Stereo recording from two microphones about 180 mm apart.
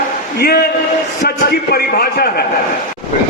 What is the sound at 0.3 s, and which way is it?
Speech, 60° left (ahead or behind).